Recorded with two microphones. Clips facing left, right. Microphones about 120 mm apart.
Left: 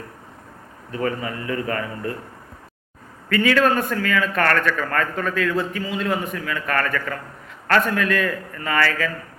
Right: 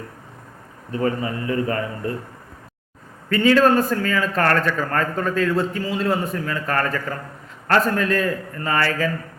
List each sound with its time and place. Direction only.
0.9 s a man's voice: 30° right (ahead or behind)
3.2 s a man's voice: 25° right (ahead or behind)